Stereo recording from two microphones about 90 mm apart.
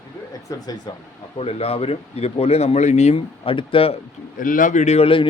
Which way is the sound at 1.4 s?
90° left.